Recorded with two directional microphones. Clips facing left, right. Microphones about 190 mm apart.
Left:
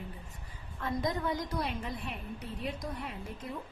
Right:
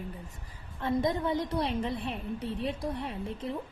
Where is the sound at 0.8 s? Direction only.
25° right (ahead or behind).